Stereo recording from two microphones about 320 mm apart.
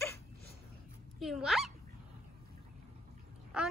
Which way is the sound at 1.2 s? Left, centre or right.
Centre.